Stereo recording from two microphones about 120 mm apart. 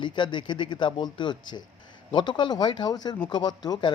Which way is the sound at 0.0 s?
40° left (ahead or behind).